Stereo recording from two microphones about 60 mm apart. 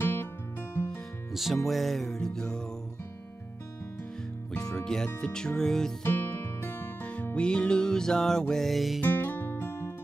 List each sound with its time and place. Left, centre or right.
0.0 s music: left
1.3 s music: centre
4.5 s music: centre
6.0 s music: left
7.0 s music: left; by 9.0 s centre
9.0 s music: left